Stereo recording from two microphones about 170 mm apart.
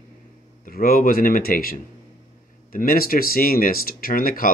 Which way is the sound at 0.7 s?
60° left (ahead or behind).